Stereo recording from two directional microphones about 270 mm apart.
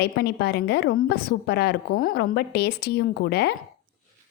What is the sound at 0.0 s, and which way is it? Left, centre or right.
A woman's voice, left.